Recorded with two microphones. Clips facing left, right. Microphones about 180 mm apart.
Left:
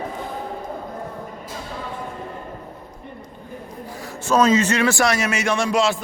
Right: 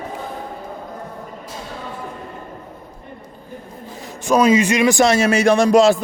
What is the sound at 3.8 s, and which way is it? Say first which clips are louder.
A man's voice: even; 20° right (ahead or behind).